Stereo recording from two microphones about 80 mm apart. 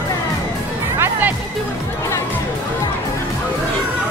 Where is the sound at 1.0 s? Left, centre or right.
Right.